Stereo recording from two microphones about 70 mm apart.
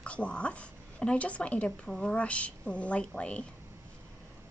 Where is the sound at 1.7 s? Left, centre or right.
Centre.